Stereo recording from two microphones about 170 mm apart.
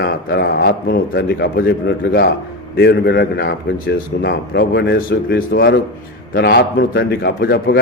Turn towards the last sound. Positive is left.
turn(degrees=65)  # may be behind; listen again after turning